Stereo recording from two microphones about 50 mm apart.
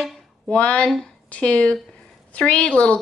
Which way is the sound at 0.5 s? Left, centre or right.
Left.